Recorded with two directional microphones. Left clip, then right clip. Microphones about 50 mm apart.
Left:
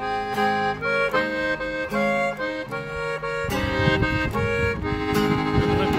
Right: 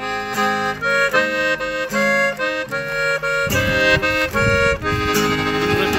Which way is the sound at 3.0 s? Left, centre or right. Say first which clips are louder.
Right 9 dB; centre.